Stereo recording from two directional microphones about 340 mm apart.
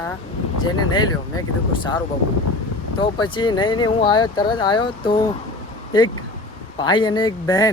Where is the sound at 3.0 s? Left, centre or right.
Centre.